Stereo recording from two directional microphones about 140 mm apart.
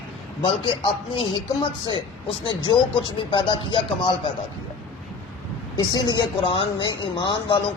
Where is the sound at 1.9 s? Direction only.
35° left (ahead or behind).